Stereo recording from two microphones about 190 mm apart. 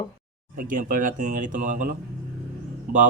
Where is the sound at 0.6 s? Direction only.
45° right (ahead or behind).